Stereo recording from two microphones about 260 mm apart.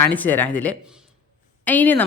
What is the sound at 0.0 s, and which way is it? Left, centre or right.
A woman's voice, centre.